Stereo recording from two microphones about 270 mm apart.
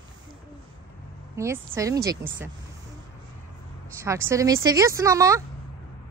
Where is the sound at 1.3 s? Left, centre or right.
Centre.